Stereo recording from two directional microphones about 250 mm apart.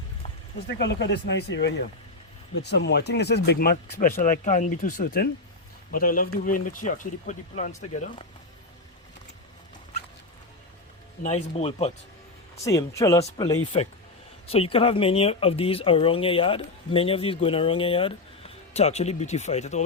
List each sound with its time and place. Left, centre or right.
0.8 s speech: left
11.2 s speech: left
12.6 s speech: centre